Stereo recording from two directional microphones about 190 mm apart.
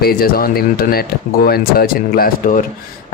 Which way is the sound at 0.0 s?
50° left (ahead or behind).